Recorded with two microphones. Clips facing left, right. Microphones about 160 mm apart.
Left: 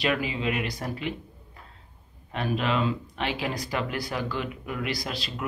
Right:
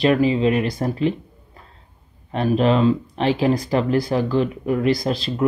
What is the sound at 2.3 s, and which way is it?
Speech, 35° right (ahead or behind).